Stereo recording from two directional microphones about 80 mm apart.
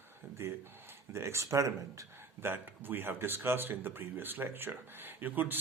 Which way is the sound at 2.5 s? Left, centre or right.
Right.